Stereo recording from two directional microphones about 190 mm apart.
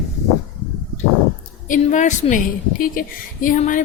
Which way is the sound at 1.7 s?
40° left (ahead or behind).